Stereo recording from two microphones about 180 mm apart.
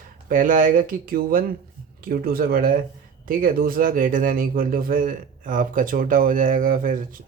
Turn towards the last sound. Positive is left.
turn(degrees=-45)  # may be behind; listen again after turning